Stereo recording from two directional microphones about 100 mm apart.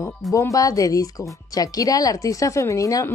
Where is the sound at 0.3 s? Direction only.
35° left (ahead or behind).